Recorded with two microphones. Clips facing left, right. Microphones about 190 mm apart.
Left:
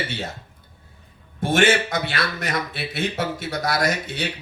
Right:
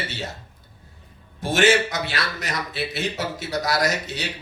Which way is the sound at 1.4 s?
55° left (ahead or behind).